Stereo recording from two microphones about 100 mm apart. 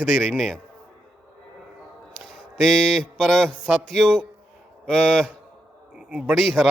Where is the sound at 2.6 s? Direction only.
5° left (ahead or behind).